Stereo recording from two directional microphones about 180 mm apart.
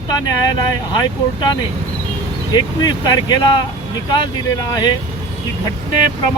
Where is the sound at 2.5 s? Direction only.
25° left (ahead or behind).